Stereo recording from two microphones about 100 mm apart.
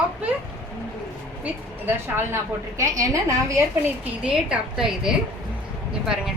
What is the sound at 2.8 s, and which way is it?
Speech, 30° right (ahead or behind).